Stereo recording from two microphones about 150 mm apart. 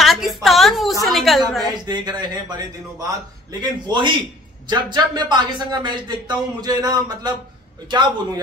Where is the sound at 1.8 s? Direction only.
30° right (ahead or behind).